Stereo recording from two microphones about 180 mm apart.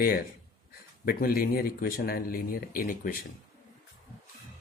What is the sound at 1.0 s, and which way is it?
Speech, 55° left (ahead or behind).